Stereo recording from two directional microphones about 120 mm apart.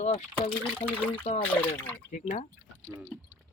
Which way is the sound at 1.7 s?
15° left (ahead or behind).